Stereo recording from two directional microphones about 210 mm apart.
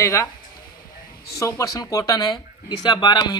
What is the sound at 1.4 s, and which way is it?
Speech, 15° left (ahead or behind).